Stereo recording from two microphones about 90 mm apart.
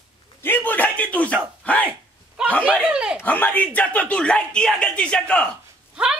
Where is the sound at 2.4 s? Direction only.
10° right (ahead or behind).